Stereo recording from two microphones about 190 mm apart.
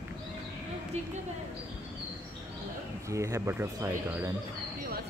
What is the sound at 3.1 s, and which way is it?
Speech, 15° right (ahead or behind).